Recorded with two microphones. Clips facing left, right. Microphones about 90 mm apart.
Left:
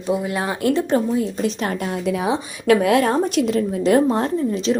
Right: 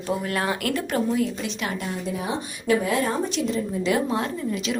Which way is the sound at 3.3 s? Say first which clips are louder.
Left 6 dB; 65° left (ahead or behind).